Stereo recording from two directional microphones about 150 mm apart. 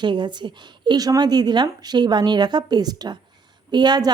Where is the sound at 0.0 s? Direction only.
30° right (ahead or behind).